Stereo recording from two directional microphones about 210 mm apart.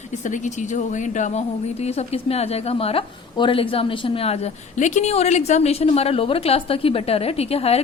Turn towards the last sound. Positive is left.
turn(degrees=30)  # may be behind; listen again after turning